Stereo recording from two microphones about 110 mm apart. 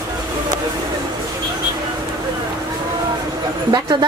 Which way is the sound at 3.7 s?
40° right (ahead or behind).